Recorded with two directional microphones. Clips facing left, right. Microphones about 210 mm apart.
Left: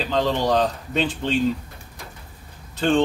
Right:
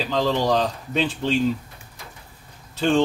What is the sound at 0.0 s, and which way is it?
Speech, 5° right (ahead or behind).